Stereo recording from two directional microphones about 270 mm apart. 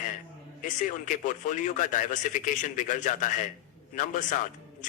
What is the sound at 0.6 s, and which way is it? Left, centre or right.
A man's voice, left.